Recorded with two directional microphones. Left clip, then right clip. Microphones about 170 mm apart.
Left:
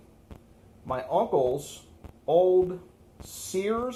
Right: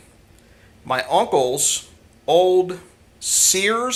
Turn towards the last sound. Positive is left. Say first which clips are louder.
# right 10 dB
turn(degrees=-25)  # may be behind; listen again after turning